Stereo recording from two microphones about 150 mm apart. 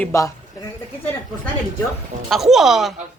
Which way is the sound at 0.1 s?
20° left (ahead or behind).